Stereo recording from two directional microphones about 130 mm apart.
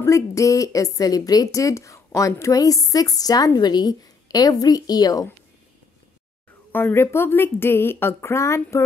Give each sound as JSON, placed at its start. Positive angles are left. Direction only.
{"t": 0.0, "sound": "speech", "side_deg": 25}
{"t": 6.7, "sound": "a woman's voice", "side_deg": 15}